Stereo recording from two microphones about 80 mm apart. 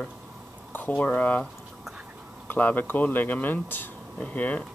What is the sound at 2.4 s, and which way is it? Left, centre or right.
Speech, left.